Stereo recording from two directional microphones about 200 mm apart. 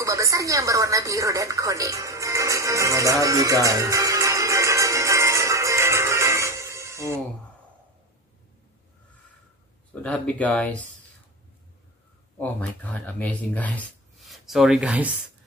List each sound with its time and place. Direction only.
0.0 s music: 15° right (ahead or behind)
10.0 s speech: 5° left (ahead or behind)
12.4 s speech: 10° left (ahead or behind)